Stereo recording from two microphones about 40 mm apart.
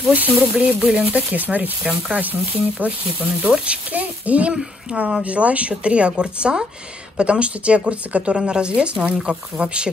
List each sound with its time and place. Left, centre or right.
0.1 s speech: right
0.7 s speech: right